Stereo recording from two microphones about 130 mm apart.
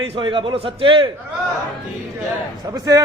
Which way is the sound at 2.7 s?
25° right (ahead or behind).